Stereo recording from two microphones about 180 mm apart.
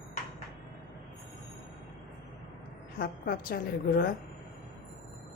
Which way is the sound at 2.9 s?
55° left (ahead or behind).